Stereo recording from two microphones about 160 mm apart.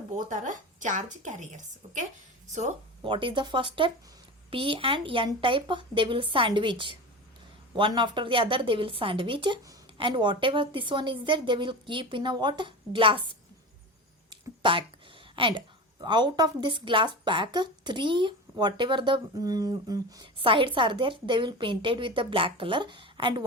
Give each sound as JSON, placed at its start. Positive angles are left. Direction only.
{"t": 0.2, "sound": "a woman's voice", "side_deg": -50}
{"t": 3.0, "sound": "a woman's voice", "side_deg": -30}